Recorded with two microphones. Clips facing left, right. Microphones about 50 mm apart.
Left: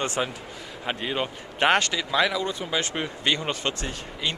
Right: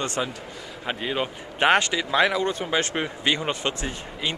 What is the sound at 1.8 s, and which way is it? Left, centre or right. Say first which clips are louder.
Speech: right 2 dB; centre.